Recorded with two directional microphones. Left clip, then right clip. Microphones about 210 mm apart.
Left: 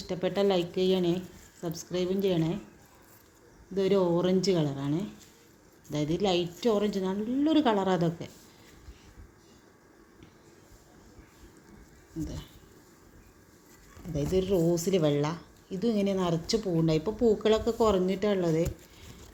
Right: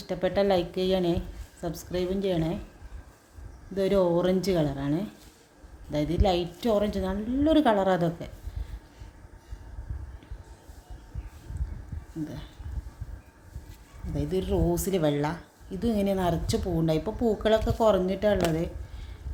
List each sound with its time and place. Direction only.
0.1 s a woman's voice: 10° right (ahead or behind)
3.8 s speech: 10° right (ahead or behind)
14.1 s speech: 10° right (ahead or behind)